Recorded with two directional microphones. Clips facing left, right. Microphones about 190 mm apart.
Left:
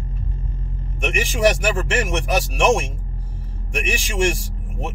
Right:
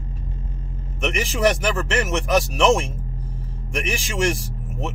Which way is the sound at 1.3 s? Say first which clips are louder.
Left 2 dB; 15° left (ahead or behind).